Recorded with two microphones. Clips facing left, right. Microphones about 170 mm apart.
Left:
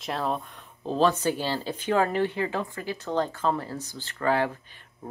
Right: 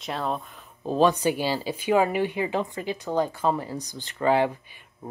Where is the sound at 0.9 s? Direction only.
15° right (ahead or behind).